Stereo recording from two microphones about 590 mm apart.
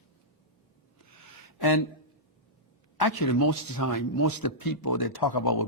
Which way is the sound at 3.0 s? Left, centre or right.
Left.